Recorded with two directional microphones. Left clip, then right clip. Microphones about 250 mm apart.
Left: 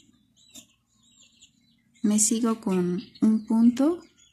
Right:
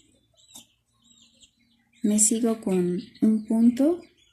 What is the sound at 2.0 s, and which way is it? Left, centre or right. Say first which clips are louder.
Speech: right 1 dB; left.